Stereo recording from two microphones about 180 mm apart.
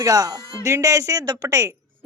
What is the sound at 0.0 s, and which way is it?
A woman's voice, 20° right (ahead or behind).